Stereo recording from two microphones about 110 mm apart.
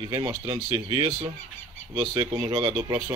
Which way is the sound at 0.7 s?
55° right (ahead or behind).